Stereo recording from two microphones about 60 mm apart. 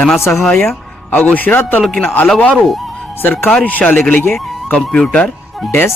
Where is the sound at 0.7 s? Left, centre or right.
Left.